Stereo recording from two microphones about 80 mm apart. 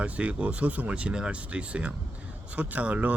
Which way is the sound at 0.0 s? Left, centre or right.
Centre.